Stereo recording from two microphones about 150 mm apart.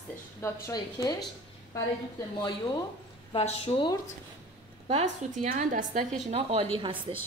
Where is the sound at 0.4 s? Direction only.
25° left (ahead or behind).